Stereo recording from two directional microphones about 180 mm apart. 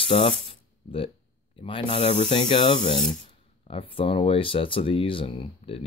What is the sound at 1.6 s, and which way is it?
Speech, 30° left (ahead or behind).